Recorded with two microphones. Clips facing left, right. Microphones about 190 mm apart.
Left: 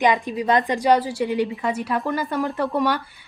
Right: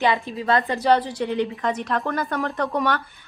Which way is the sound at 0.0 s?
15° left (ahead or behind).